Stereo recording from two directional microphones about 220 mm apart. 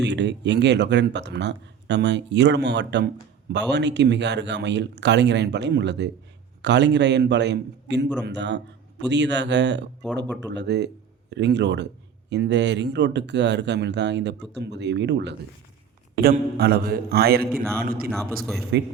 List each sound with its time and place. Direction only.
0.0 s speech: 50° right (ahead or behind)
18.0 s speech: centre (ahead or behind)
18.7 s speech: 50° right (ahead or behind)